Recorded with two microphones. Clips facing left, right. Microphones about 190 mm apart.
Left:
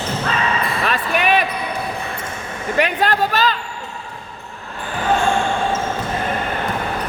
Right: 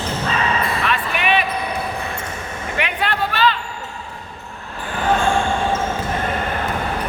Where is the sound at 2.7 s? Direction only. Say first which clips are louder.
Left 6 dB; 40° left (ahead or behind).